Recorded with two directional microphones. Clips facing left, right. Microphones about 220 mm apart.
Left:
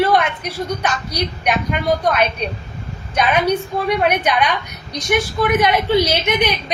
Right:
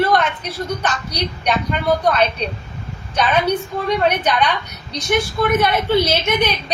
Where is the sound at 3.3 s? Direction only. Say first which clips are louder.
Left 1 dB; 10° left (ahead or behind).